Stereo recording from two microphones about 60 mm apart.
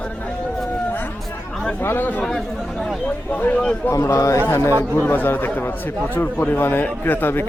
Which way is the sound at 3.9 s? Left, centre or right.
Left.